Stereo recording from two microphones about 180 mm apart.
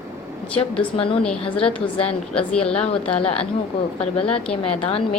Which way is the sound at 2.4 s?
5° left (ahead or behind).